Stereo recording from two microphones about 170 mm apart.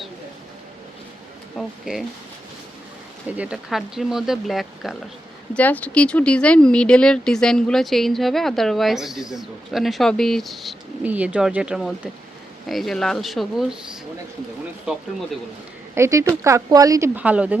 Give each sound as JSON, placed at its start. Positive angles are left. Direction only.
{"t": 1.5, "sound": "speech", "side_deg": 0}
{"t": 3.3, "sound": "speech", "side_deg": -5}
{"t": 16.0, "sound": "speech", "side_deg": -15}